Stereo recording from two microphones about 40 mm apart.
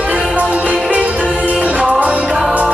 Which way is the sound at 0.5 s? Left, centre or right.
Right.